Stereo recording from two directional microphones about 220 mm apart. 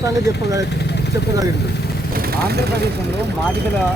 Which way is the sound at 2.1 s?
45° right (ahead or behind).